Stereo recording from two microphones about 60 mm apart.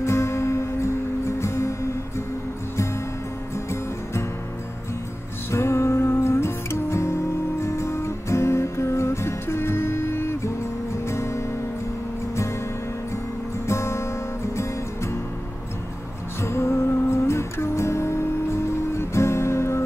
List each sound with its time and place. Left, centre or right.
0.0 s music: left
3.5 s music: left
5.5 s music: left
13.7 s music: left
16.4 s music: left